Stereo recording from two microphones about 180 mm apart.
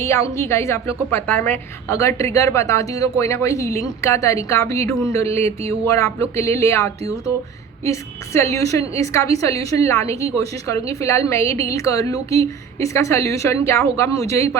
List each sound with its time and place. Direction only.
0.0 s a woman's voice: 15° left (ahead or behind)